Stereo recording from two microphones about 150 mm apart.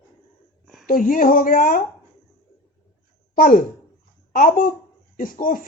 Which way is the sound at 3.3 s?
70° left (ahead or behind).